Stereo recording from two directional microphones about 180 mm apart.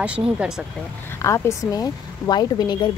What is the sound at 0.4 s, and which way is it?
Speech, 5° right (ahead or behind).